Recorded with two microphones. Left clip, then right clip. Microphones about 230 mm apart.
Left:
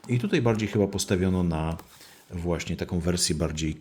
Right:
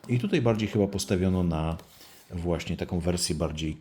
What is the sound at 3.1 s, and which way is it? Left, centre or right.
Speech, left.